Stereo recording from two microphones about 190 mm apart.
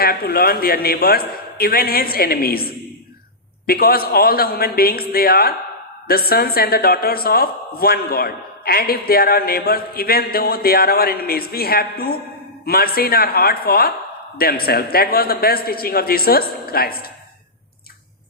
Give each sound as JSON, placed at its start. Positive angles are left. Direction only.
{"t": 0.0, "sound": "a woman's voice", "side_deg": 55}